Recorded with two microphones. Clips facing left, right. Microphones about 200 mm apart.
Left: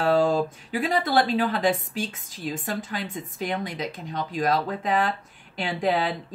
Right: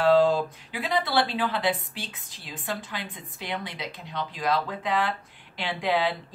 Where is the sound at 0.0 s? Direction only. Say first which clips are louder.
Right 1 dB; 45° left (ahead or behind).